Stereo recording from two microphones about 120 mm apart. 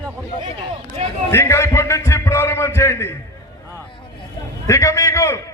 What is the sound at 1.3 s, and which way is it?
A man's voice, 20° left (ahead or behind).